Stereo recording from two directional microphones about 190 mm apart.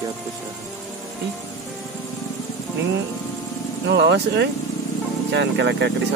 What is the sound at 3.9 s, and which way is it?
Speech, 65° right (ahead or behind).